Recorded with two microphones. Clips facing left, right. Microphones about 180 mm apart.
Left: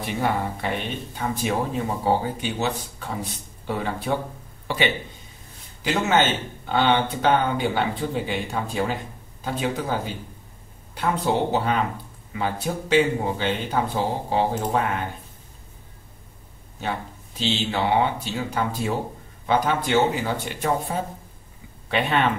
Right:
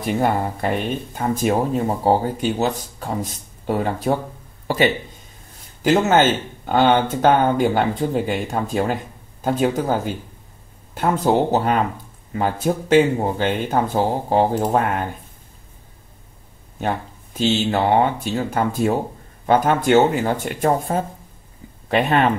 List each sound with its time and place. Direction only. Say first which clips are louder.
0.0 s speech: right 5 dB; 45° right (ahead or behind)
16.8 s speech: right 5 dB; 50° right (ahead or behind)